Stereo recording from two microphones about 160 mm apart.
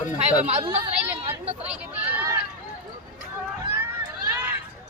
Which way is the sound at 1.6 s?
10° right (ahead or behind).